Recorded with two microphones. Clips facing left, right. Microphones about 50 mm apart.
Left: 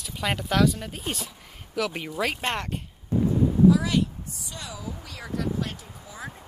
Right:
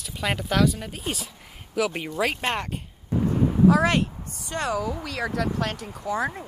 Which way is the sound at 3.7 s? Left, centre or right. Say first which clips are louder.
Right 2 dB; right.